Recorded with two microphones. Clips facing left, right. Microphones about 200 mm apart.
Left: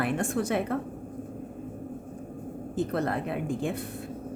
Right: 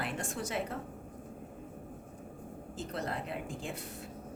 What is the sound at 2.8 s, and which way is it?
Speech, 60° left (ahead or behind).